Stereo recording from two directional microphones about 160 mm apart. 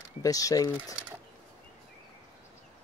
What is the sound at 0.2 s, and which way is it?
Speech, 20° left (ahead or behind).